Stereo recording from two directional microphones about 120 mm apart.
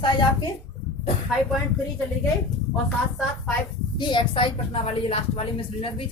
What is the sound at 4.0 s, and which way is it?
A woman's voice, 40° left (ahead or behind).